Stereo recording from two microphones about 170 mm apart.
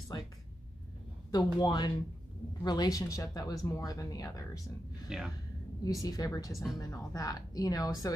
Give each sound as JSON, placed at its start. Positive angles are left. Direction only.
{"t": 1.3, "sound": "speech", "side_deg": 25}
{"t": 5.1, "sound": "speech", "side_deg": -5}
{"t": 5.9, "sound": "speech", "side_deg": 20}